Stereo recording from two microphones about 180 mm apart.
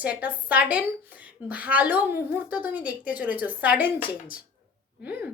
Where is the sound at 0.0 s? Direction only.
10° right (ahead or behind).